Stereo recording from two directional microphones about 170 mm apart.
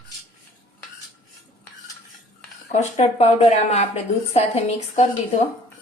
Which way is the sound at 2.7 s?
40° left (ahead or behind).